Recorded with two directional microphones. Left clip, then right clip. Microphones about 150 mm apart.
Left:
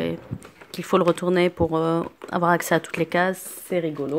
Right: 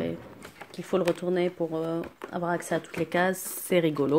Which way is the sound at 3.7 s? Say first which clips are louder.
Right 1 dB; 20° right (ahead or behind).